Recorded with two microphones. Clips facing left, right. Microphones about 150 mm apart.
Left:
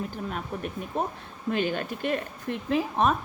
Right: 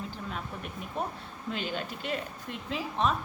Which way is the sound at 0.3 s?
50° left (ahead or behind).